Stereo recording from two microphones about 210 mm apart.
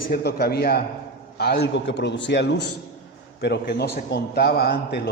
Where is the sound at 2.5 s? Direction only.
90° left.